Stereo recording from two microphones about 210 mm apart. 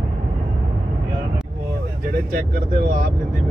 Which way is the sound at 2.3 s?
45° right (ahead or behind).